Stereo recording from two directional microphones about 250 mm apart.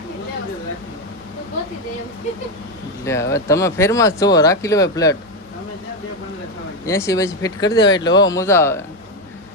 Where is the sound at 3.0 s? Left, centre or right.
Centre.